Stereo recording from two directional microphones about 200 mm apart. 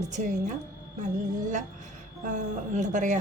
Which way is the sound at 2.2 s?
35° right (ahead or behind).